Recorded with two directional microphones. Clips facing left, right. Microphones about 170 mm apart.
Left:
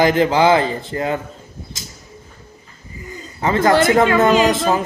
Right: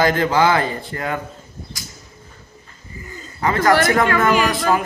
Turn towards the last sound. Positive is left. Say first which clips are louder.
# left 3 dB
turn(degrees=25)  # may be behind; listen again after turning